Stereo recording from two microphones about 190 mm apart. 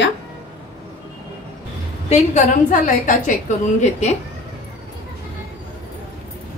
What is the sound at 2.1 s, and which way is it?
A woman's voice, 40° left (ahead or behind).